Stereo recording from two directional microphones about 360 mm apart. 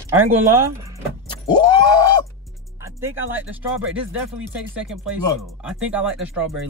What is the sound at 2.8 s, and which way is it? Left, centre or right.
Speech, centre.